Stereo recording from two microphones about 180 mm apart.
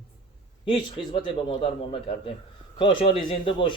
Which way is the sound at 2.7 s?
30° left (ahead or behind).